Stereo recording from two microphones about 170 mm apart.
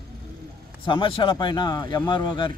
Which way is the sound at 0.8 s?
30° left (ahead or behind).